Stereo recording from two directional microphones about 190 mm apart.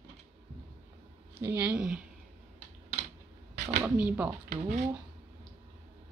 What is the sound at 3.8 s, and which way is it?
Speech, 5° right (ahead or behind).